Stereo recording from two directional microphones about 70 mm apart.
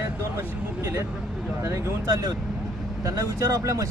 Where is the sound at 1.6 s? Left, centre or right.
Right.